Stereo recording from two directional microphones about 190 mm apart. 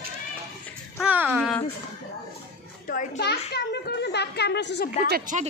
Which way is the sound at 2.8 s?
45° left (ahead or behind).